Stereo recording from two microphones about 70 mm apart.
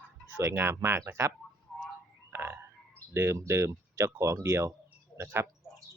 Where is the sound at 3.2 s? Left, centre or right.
Right.